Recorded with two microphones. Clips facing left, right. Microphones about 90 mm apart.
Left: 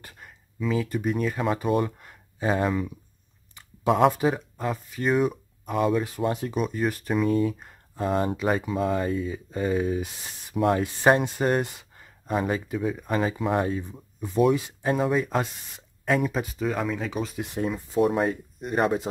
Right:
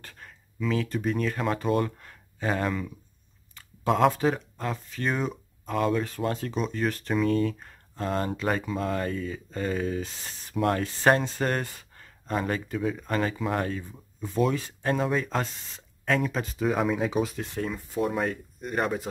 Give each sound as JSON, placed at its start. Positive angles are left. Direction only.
{"t": 0.0, "sound": "speech", "side_deg": 5}
{"t": 6.0, "sound": "speech", "side_deg": 15}
{"t": 17.4, "sound": "speech", "side_deg": 15}